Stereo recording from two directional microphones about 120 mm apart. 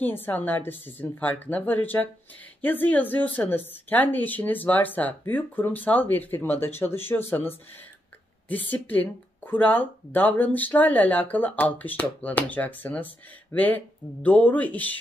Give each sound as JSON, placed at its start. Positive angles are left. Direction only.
{"t": 0.0, "sound": "speech", "side_deg": 15}